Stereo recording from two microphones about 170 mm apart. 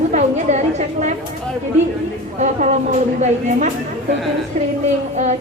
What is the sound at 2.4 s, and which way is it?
A woman's voice, 45° right (ahead or behind).